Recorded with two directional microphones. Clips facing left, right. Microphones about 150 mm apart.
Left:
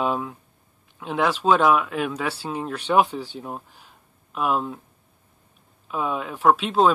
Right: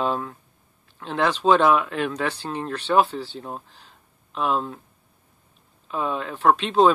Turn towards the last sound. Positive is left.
turn(degrees=5)  # may be behind; listen again after turning